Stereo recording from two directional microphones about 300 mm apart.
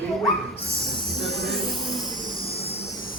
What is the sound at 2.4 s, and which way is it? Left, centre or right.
Vehicle, centre.